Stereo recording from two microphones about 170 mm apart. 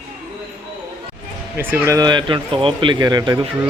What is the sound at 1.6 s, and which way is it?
Speech, 10° right (ahead or behind).